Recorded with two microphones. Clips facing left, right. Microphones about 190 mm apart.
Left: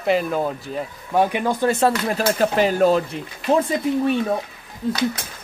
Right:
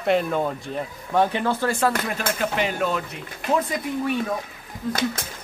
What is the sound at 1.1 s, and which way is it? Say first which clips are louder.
Speech: left 2 dB; 15° left (ahead or behind).